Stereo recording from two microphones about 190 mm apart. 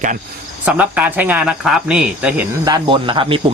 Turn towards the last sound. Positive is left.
turn(degrees=-25)  # may be behind; listen again after turning